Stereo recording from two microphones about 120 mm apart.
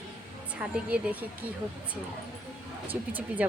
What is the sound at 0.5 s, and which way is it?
Speech, 10° right (ahead or behind).